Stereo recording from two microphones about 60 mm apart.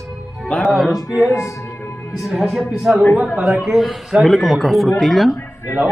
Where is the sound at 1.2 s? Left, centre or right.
Left.